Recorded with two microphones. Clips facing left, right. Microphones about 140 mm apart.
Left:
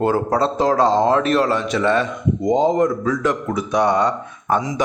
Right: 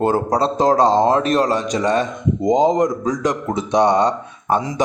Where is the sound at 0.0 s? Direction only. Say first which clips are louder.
Right 1 dB; 30° right (ahead or behind).